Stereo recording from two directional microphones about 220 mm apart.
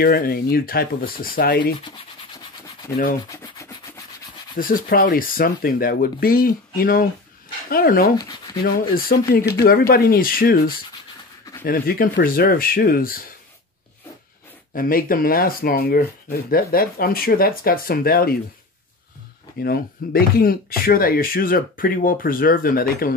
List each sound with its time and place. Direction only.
0.0 s speech: 45° left (ahead or behind)
1.9 s rub: 20° left (ahead or behind)
4.6 s speech: 40° left (ahead or behind)
8.2 s speech: 15° left (ahead or behind)
8.6 s speech: 40° left (ahead or behind)
14.7 s speech: 40° left (ahead or behind)
19.6 s speech: 45° left (ahead or behind)